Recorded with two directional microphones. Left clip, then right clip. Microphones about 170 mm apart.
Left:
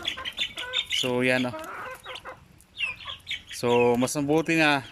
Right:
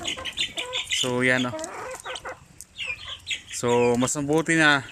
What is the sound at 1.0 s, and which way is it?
Speech, 5° left (ahead or behind).